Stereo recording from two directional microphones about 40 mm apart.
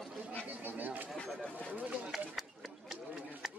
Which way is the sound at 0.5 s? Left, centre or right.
Right.